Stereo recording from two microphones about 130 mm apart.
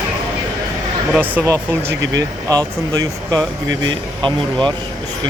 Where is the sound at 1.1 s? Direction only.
15° right (ahead or behind).